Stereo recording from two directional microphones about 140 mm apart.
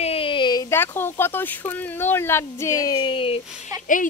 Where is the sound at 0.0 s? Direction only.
40° left (ahead or behind).